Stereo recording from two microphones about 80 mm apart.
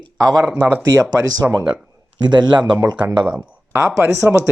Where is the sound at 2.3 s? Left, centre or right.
Right.